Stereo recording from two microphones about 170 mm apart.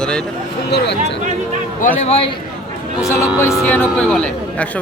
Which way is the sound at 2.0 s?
35° left (ahead or behind).